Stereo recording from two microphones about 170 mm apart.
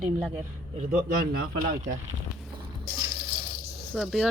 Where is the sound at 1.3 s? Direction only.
60° right (ahead or behind).